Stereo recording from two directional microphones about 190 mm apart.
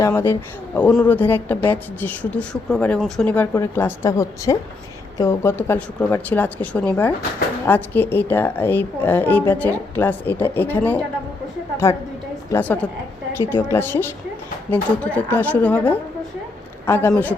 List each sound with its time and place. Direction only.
0.0 s a woman's voice: 15° left (ahead or behind)